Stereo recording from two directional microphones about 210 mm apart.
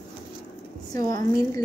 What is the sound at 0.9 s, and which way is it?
Speech, 15° left (ahead or behind).